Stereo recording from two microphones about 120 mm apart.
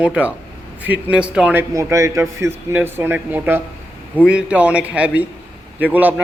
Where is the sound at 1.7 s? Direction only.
25° right (ahead or behind).